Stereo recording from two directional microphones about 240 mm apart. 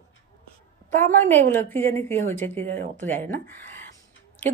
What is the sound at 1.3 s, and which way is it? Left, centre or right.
Speech, centre.